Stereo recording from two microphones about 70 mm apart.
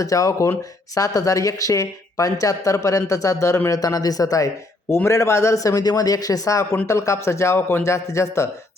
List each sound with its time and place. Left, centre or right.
0.0 s speech: left
3.7 s speech: left
4.9 s speech: left
7.9 s speech: left